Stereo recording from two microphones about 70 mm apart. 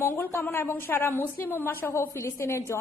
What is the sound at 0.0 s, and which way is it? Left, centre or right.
A woman's voice, left.